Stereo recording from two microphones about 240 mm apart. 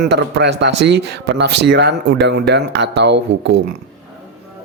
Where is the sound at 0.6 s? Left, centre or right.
Right.